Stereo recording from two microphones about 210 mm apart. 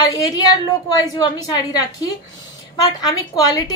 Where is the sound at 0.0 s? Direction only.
15° left (ahead or behind).